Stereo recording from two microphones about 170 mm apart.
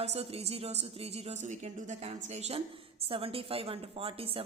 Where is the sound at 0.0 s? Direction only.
35° right (ahead or behind).